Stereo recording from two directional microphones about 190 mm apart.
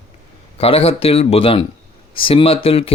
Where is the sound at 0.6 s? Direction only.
30° left (ahead or behind).